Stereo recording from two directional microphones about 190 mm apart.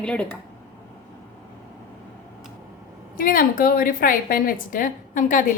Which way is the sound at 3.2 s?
45° left (ahead or behind).